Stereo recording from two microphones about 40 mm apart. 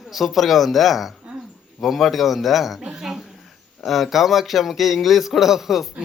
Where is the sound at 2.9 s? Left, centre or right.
Centre.